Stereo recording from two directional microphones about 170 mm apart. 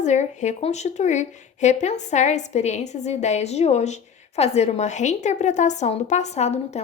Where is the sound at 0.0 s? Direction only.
45° left (ahead or behind).